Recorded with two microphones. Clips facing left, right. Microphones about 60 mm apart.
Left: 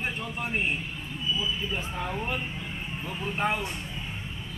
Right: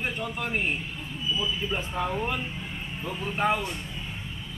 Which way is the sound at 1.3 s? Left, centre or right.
Centre.